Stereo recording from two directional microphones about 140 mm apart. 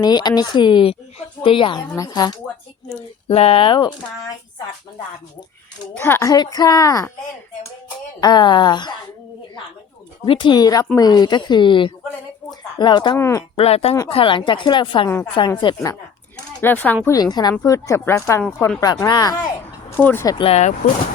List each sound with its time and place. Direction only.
0.0 s speech: 30° left (ahead or behind)
2.0 s speech: 25° left (ahead or behind)
3.2 s speech: 45° left (ahead or behind)
6.0 s speech: 15° left (ahead or behind)
6.2 s speech: 30° left (ahead or behind)
8.2 s speech: 30° left (ahead or behind)
10.2 s speech: 35° left (ahead or behind)
13.1 s speech: 20° left (ahead or behind)
13.6 s speech: 45° left (ahead or behind)
16.6 s speech: 15° left (ahead or behind); by 19.4 s 30° left (ahead or behind)
19.9 s speech: 15° left (ahead or behind)
20.4 s speech: 50° left (ahead or behind)